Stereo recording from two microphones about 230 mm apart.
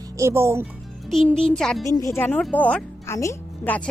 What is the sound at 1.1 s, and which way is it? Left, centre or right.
Speech, centre.